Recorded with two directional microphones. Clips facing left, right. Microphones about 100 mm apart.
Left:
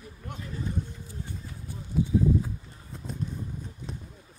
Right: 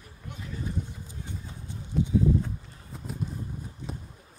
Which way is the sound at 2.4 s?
Centre (ahead or behind).